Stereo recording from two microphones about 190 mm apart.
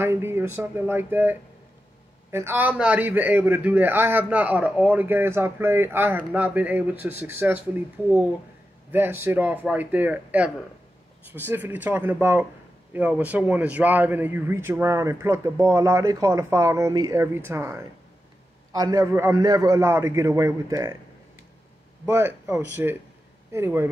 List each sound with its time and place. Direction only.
0.0 s a man's voice: 10° right (ahead or behind)
22.0 s a man's voice: 15° right (ahead or behind)